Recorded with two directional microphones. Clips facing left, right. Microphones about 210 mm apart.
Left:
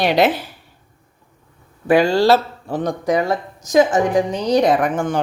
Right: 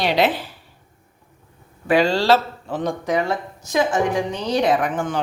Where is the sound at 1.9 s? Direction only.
45° left (ahead or behind).